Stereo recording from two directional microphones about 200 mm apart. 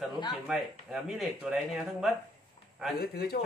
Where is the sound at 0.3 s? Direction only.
Centre (ahead or behind).